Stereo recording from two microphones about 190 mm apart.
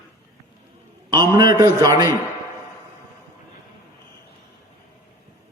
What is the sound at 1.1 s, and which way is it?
A man's voice, 20° right (ahead or behind).